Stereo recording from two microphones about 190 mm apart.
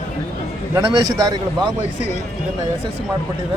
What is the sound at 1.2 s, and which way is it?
Speech, 20° right (ahead or behind).